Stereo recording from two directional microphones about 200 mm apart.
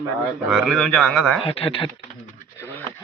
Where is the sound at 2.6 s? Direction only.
10° left (ahead or behind).